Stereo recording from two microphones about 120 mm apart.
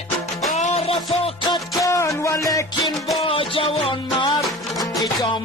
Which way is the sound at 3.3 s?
50° left (ahead or behind).